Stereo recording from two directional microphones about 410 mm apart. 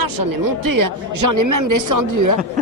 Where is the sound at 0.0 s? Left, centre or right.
Right.